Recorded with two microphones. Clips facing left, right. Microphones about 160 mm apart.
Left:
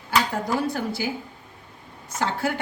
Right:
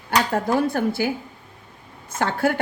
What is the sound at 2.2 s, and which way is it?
Speech, 55° right (ahead or behind).